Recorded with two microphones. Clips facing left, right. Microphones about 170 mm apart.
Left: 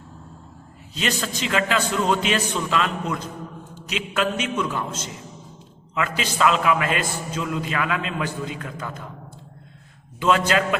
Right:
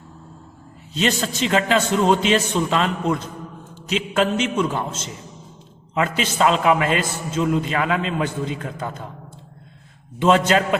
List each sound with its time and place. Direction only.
0.9 s a man's voice: 30° right (ahead or behind)
10.2 s a man's voice: 30° right (ahead or behind)